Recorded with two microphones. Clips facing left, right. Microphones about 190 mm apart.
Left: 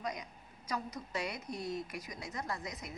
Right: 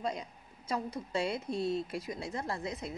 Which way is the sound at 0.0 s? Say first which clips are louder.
Right 4 dB; 30° right (ahead or behind).